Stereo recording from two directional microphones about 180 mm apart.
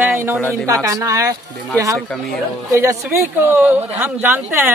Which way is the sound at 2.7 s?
15° right (ahead or behind).